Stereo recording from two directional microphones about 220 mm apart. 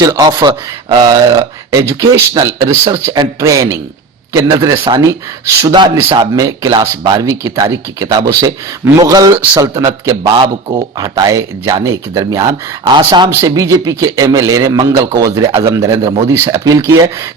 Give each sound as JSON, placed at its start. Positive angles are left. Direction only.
{"t": 0.0, "sound": "speech", "side_deg": -15}